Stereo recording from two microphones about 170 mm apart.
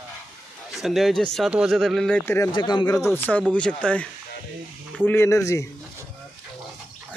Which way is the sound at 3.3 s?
10° left (ahead or behind).